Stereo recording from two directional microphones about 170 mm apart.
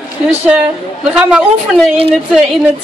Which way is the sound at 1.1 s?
5° right (ahead or behind).